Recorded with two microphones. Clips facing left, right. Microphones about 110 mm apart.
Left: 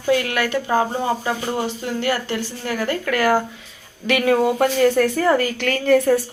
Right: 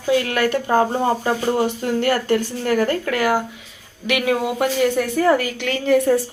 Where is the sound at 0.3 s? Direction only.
40° right (ahead or behind).